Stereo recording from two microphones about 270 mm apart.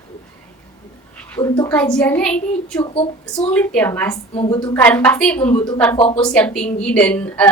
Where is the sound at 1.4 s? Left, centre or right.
Centre.